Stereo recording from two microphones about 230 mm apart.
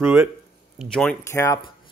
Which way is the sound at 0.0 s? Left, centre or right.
Centre.